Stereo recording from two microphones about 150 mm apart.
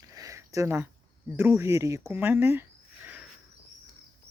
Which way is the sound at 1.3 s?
15° right (ahead or behind).